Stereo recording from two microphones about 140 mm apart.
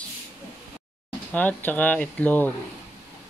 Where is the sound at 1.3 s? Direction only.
10° left (ahead or behind).